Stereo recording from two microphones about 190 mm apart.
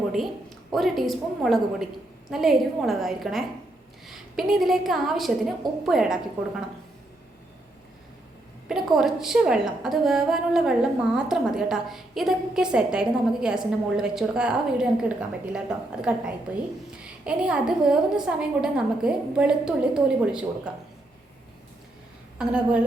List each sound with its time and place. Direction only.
0.7 s a woman's voice: centre (ahead or behind)
8.7 s a woman's voice: centre (ahead or behind)
22.4 s a woman's voice: 5° right (ahead or behind)